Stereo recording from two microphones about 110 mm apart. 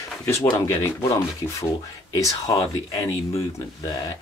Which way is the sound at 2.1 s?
30° left (ahead or behind).